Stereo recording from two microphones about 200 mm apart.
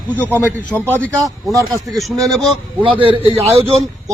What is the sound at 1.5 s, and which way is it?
Speech, 15° right (ahead or behind).